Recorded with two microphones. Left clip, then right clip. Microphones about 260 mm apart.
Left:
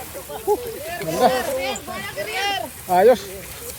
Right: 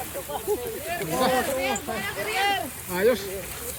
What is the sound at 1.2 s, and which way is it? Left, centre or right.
Speech, centre.